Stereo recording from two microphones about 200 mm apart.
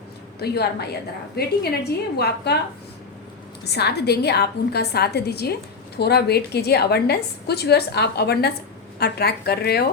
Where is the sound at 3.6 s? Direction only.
55° left (ahead or behind).